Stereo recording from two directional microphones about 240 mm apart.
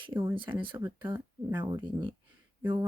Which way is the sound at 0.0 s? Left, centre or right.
Centre.